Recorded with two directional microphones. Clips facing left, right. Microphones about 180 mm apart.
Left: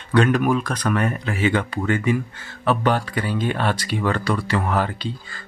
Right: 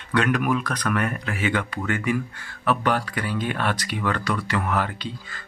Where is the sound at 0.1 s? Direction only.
30° left (ahead or behind).